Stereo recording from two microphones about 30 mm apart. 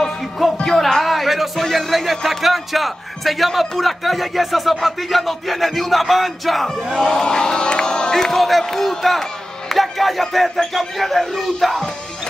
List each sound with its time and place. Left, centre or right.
0.7 s a sound: centre
1.0 s music: centre
1.6 s a man's voice: centre
7.0 s crowd: left
8.1 s speech: centre
8.4 s a man's voice: centre
9.7 s a sound: centre
10.7 s a man's voice: centre